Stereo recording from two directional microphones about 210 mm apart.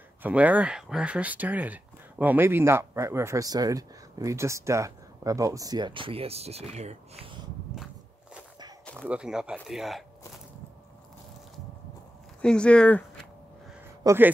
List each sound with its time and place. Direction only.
0.2 s speech: 5° right (ahead or behind); by 7.0 s 30° right (ahead or behind)
9.1 s speech: 5° right (ahead or behind)
12.4 s speech: 5° left (ahead or behind)
14.0 s speech: 10° right (ahead or behind)